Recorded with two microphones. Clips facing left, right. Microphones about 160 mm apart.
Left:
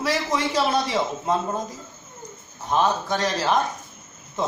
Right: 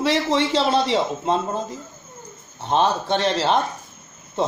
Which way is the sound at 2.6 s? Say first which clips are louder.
Right 2 dB; 30° right (ahead or behind).